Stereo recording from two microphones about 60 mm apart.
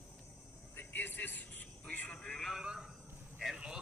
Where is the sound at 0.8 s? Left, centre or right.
Left.